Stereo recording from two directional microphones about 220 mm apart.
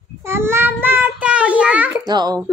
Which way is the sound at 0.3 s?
10° right (ahead or behind).